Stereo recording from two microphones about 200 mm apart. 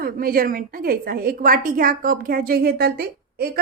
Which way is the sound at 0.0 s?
45° right (ahead or behind).